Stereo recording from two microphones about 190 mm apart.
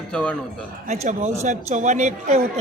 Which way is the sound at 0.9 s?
40° right (ahead or behind).